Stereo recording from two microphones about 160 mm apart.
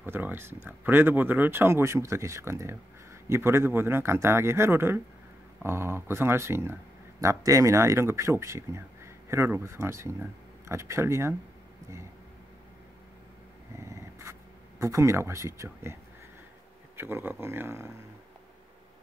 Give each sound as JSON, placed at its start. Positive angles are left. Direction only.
{"t": 0.0, "sound": "speech", "side_deg": -15}
{"t": 13.7, "sound": "dog", "side_deg": -20}
{"t": 14.8, "sound": "speech", "side_deg": -20}